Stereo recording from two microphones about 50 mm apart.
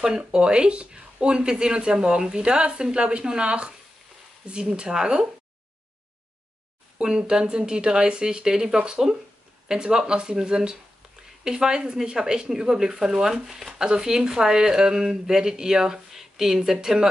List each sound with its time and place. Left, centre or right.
0.0 s speech: centre
7.0 s speech: centre